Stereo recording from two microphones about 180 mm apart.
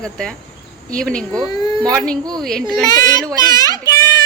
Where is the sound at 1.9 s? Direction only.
5° left (ahead or behind).